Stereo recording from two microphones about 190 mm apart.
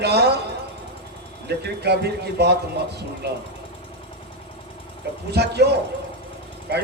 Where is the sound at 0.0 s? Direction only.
60° right (ahead or behind).